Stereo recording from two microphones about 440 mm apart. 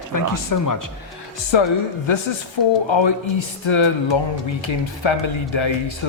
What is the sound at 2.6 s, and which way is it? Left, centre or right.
Speech, left.